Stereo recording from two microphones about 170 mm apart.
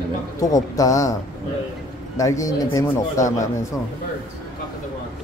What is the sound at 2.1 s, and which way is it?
Speech, 20° left (ahead or behind).